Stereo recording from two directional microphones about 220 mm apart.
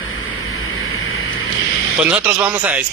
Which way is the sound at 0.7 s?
70° left (ahead or behind).